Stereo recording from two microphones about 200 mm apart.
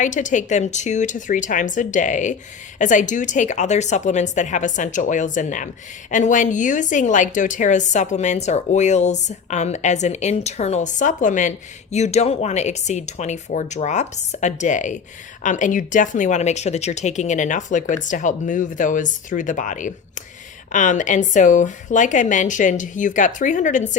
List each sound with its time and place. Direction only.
0.0 s a woman's voice: 40° left (ahead or behind)